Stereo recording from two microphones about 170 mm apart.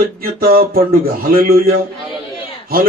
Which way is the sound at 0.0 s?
60° right (ahead or behind).